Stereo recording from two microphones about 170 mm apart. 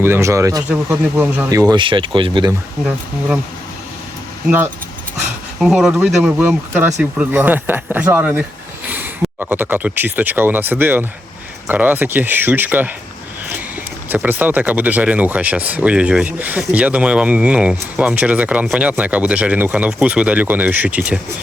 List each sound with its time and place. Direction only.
0.0 s speech: 15° right (ahead or behind)
4.4 s speech: 10° right (ahead or behind)
14.1 s speech: 10° right (ahead or behind)